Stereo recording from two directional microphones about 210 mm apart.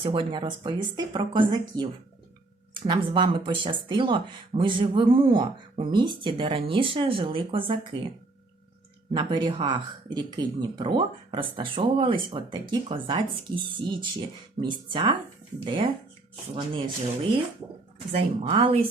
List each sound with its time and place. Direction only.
0.0 s speech: 25° right (ahead or behind)
9.1 s speech: 20° right (ahead or behind)
18.1 s speech: 25° right (ahead or behind)